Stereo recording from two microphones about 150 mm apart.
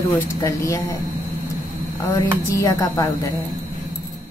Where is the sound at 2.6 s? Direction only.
20° left (ahead or behind).